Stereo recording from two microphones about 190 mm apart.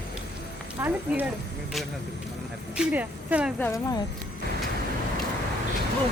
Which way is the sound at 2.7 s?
10° right (ahead or behind).